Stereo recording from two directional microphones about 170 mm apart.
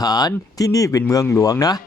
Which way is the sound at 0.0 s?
25° left (ahead or behind).